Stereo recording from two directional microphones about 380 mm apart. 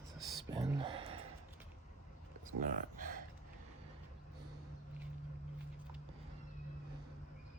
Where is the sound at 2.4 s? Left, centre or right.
Right.